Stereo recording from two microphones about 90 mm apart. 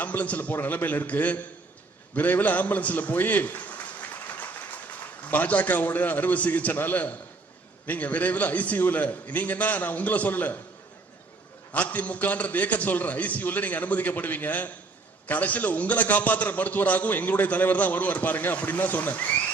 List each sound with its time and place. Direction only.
0.0 s a man's voice: 15° left (ahead or behind)
5.3 s a man's voice: 15° left (ahead or behind)
11.7 s a man's voice: 15° left (ahead or behind)